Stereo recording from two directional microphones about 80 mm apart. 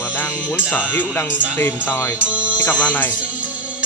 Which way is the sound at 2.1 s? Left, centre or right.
Centre.